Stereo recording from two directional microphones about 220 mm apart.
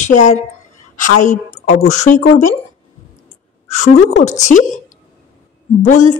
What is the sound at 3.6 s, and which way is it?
Speech, 30° left (ahead or behind).